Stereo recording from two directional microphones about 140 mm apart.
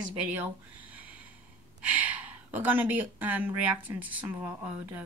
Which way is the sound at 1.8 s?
10° right (ahead or behind).